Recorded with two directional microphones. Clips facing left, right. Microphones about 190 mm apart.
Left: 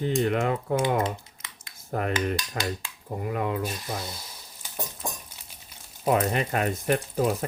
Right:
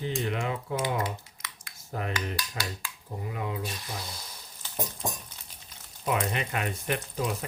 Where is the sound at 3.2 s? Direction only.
60° left (ahead or behind).